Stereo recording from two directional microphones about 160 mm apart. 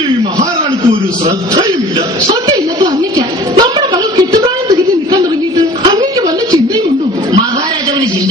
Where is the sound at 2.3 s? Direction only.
25° right (ahead or behind).